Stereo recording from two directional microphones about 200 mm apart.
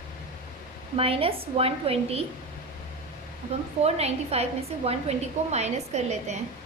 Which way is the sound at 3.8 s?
30° right (ahead or behind).